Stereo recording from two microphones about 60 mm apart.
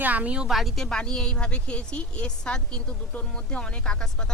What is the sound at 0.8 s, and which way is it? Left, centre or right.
A woman's voice, centre.